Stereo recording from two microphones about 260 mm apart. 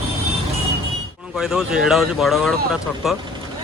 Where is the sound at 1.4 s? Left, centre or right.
Centre.